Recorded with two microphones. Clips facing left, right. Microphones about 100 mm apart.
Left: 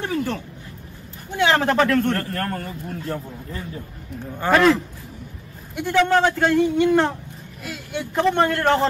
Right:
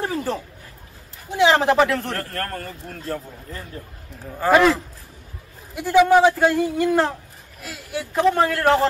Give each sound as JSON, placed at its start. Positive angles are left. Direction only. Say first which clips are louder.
{"t": 0.0, "sound": "speech", "louder": "even", "side_deg": -35}
{"t": 1.4, "sound": "speech", "louder": "right 2 dB", "side_deg": -25}
{"t": 1.7, "sound": "speech", "louder": "even", "side_deg": -5}
{"t": 2.6, "sound": "speech", "louder": "left 3 dB", "side_deg": 25}
{"t": 4.3, "sound": "speech", "louder": "right 1 dB", "side_deg": -5}
{"t": 5.9, "sound": "speech", "louder": "right 4 dB", "side_deg": -10}